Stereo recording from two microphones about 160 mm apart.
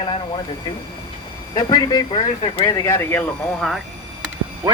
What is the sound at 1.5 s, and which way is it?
Speech, 25° left (ahead or behind).